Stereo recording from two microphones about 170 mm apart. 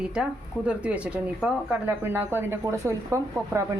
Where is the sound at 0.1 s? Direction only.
5° right (ahead or behind).